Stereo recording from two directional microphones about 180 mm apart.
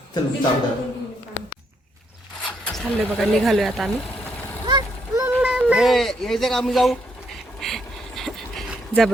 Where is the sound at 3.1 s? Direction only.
Centre (ahead or behind).